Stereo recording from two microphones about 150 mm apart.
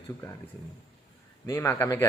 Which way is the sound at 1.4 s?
15° left (ahead or behind).